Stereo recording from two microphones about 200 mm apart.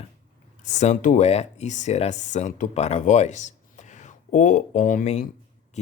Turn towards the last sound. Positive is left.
turn(degrees=35)  # may be behind; listen again after turning